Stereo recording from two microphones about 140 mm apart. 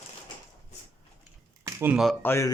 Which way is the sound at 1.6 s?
20° right (ahead or behind).